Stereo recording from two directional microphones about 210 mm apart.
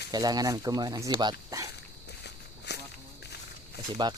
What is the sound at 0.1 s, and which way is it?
Speech, 20° right (ahead or behind).